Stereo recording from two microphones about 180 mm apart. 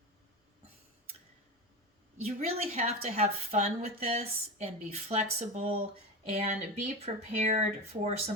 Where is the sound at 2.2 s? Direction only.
35° right (ahead or behind).